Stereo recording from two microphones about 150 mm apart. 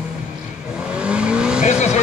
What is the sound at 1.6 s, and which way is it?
Vehicle, 50° left (ahead or behind).